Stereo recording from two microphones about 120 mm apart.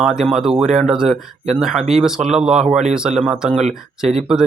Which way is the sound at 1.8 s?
65° right (ahead or behind).